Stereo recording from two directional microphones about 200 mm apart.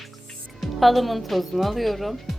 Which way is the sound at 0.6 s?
Centre (ahead or behind).